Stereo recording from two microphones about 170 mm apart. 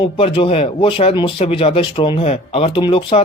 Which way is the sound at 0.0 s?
30° left (ahead or behind).